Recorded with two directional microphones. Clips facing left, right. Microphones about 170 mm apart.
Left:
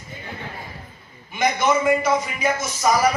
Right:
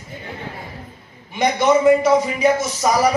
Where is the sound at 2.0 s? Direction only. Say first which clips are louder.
Right 6 dB; 30° right (ahead or behind).